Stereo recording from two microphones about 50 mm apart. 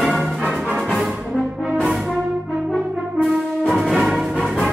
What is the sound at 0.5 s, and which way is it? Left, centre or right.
Music, right.